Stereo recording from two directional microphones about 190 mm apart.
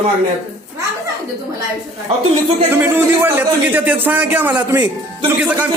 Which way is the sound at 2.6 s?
10° right (ahead or behind).